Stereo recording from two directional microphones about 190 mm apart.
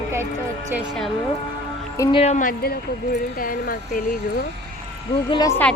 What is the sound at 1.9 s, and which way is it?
Speech, 15° left (ahead or behind).